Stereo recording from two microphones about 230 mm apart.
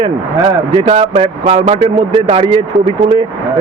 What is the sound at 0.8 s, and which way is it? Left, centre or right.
Speech, right.